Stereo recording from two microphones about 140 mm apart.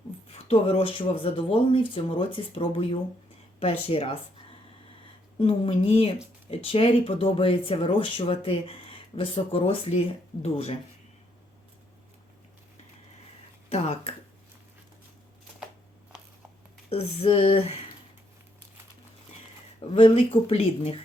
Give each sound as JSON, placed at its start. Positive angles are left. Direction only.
{"t": 0.3, "sound": "speech", "side_deg": 45}
{"t": 5.4, "sound": "speech", "side_deg": 40}
{"t": 13.7, "sound": "speech", "side_deg": 45}
{"t": 16.9, "sound": "speech", "side_deg": 45}
{"t": 19.9, "sound": "speech", "side_deg": 45}